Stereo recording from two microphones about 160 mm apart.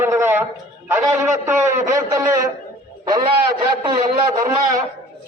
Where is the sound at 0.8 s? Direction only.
15° right (ahead or behind).